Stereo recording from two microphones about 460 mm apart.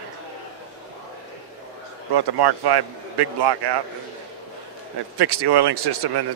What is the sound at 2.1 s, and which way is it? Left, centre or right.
Speech, right.